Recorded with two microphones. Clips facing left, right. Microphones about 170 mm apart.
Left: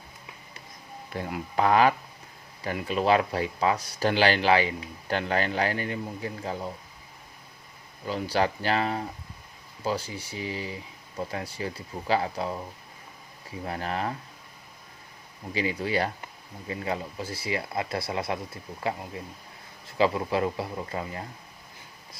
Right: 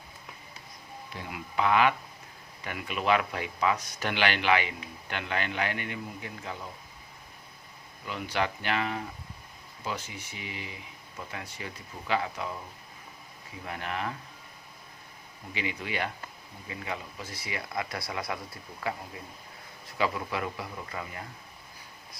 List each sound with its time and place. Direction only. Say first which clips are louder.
1.1 s speech: left 5 dB; 45° left (ahead or behind)
8.0 s speech: left 5 dB; 35° left (ahead or behind)
13.7 s speech: left 4 dB; 35° left (ahead or behind)
15.5 s speech: left 7 dB; 35° left (ahead or behind)